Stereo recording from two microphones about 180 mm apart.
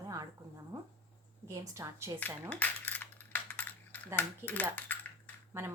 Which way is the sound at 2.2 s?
10° left (ahead or behind).